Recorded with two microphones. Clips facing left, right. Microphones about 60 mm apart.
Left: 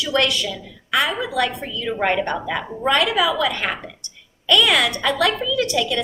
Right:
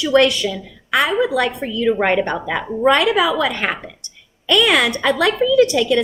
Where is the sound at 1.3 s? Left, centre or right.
Right.